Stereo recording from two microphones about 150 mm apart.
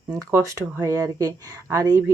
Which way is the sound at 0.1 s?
20° right (ahead or behind).